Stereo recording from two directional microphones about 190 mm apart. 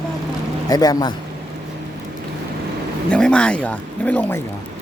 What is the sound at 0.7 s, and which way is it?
Speech, 20° left (ahead or behind).